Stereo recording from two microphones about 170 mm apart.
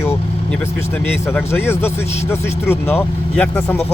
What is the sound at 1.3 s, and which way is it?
Speech, 15° left (ahead or behind).